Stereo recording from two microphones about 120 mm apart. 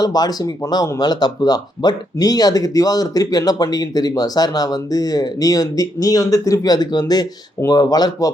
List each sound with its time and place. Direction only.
0.0 s speech: 35° left (ahead or behind)